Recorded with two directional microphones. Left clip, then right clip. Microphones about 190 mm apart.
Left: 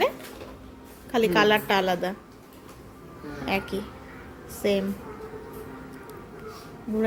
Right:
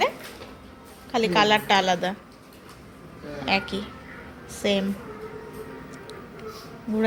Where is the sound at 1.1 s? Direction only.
30° left (ahead or behind).